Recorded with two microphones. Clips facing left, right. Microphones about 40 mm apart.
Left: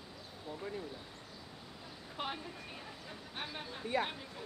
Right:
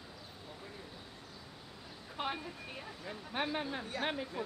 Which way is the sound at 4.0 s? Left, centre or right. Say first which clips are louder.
Right 3 dB; right.